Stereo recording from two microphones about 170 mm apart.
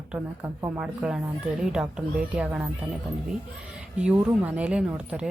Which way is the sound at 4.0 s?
5° right (ahead or behind).